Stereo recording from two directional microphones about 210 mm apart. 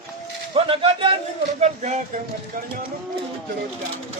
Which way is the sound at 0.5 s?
25° right (ahead or behind).